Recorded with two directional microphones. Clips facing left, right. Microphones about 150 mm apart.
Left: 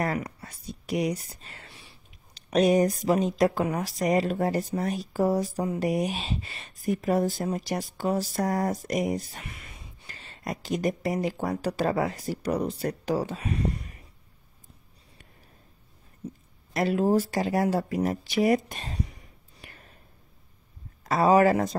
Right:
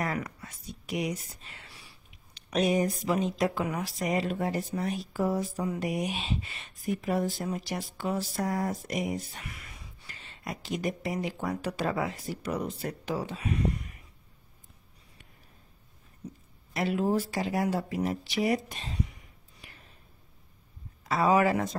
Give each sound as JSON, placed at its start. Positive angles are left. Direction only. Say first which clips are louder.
{"t": 0.4, "sound": "speech", "louder": "left 3 dB", "side_deg": 35}
{"t": 1.7, "sound": "a sound", "louder": "left 2 dB", "side_deg": 25}
{"t": 2.5, "sound": "speech", "louder": "left 5 dB", "side_deg": 40}
{"t": 9.5, "sound": "whispering", "louder": "left 1 dB", "side_deg": 25}
{"t": 10.0, "sound": "speech", "louder": "left 5 dB", "side_deg": 40}
{"t": 16.2, "sound": "a sound", "louder": "left 4 dB", "side_deg": 30}
{"t": 16.7, "sound": "speech", "louder": "left 4 dB", "side_deg": 40}
{"t": 19.6, "sound": "whispering", "louder": "left 4 dB", "side_deg": 55}
{"t": 21.0, "sound": "speech", "louder": "left 4 dB", "side_deg": 40}